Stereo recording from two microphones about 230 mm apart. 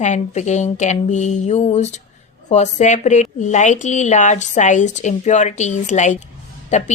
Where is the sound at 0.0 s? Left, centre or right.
Left.